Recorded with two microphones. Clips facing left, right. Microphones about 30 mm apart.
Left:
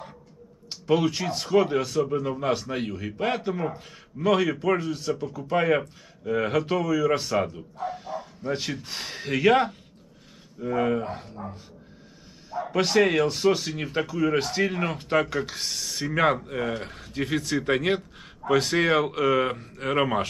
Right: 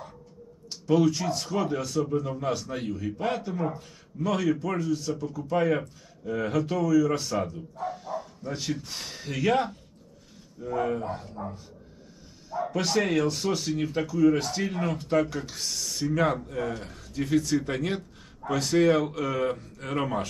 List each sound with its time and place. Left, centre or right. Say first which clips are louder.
0.7 s a man's voice: even; left
12.4 s a man's voice: left 3 dB; left